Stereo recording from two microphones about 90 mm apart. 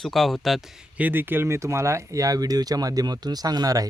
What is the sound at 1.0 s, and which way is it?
Speech, 20° right (ahead or behind).